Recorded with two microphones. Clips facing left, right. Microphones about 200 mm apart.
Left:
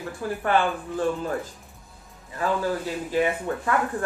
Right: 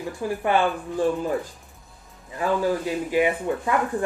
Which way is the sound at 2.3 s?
15° right (ahead or behind).